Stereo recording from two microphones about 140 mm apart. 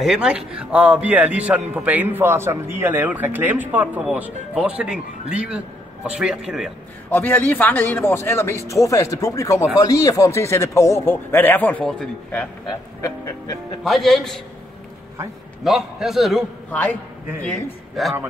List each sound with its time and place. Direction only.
0.0 s a man's voice: 5° right (ahead or behind)
7.1 s speech: 15° left (ahead or behind)
12.6 s speech: 25° left (ahead or behind)
13.8 s a man's voice: centre (ahead or behind)
15.6 s a man's voice: centre (ahead or behind)
18.0 s a man's voice: centre (ahead or behind)